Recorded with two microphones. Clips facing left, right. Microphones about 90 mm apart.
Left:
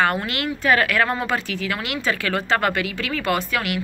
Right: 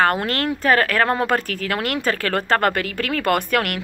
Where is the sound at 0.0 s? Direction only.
45° right (ahead or behind).